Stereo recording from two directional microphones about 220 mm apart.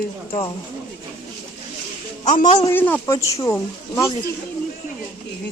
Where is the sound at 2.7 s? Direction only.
10° left (ahead or behind).